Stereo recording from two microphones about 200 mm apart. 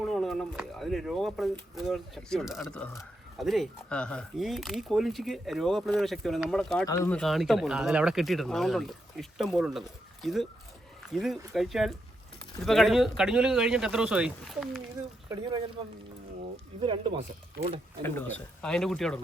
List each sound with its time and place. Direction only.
0.0 s speech: centre (ahead or behind)
6.8 s speech: 15° left (ahead or behind)
7.2 s speech: centre (ahead or behind)
15.3 s speech: 20° right (ahead or behind)
16.8 s speech: 25° right (ahead or behind)
18.0 s speech: 10° left (ahead or behind)